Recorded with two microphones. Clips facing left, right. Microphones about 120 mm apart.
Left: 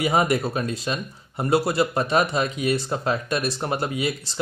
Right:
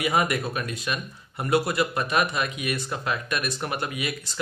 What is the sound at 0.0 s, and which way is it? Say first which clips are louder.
Speech: left 3 dB; 30° left (ahead or behind).